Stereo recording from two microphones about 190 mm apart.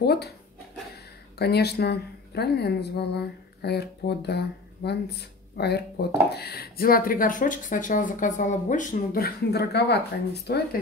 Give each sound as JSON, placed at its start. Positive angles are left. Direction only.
{"t": 0.0, "sound": "speech", "side_deg": 60}
{"t": 1.4, "sound": "a woman's voice", "side_deg": 60}